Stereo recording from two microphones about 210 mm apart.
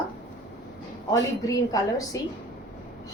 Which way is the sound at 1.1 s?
15° left (ahead or behind).